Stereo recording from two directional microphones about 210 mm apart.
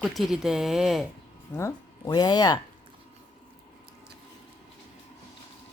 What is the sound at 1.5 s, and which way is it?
Speech, 15° left (ahead or behind).